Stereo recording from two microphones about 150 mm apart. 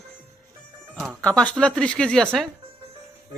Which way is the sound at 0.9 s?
5° right (ahead or behind).